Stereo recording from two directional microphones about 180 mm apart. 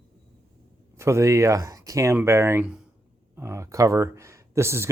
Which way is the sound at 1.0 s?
15° right (ahead or behind).